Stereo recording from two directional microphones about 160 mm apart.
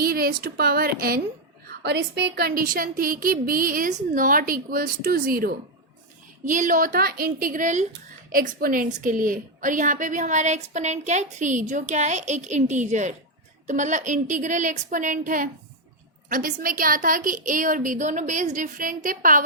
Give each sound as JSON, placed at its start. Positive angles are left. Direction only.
{"t": 0.0, "sound": "a woman's voice", "side_deg": -70}
{"t": 1.6, "sound": "a woman's voice", "side_deg": -80}
{"t": 6.4, "sound": "a woman's voice", "side_deg": -55}
{"t": 8.3, "sound": "a woman's voice", "side_deg": -60}